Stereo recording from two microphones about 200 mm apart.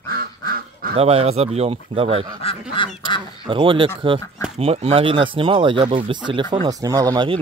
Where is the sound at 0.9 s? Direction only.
30° right (ahead or behind).